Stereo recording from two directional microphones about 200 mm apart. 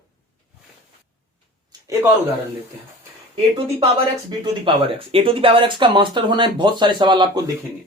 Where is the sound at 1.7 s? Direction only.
20° right (ahead or behind).